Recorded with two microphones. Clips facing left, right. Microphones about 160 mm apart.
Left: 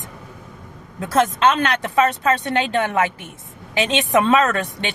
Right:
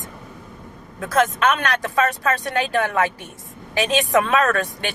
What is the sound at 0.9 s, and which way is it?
Speech, 30° left (ahead or behind).